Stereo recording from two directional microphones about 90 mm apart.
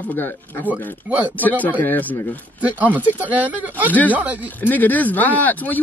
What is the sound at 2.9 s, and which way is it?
Speech, 20° right (ahead or behind).